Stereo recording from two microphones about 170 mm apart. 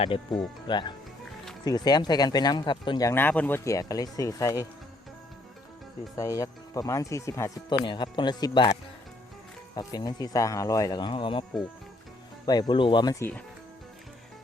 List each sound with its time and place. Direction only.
0.0 s speech: 30° left (ahead or behind)
6.1 s speech: 20° left (ahead or behind)
9.7 s speech: 25° left (ahead or behind)
12.5 s speech: 25° left (ahead or behind)